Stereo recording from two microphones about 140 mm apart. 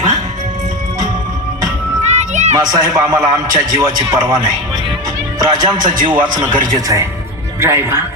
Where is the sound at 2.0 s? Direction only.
55° right (ahead or behind).